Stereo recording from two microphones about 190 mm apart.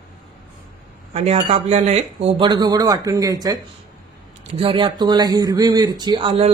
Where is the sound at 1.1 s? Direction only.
35° right (ahead or behind).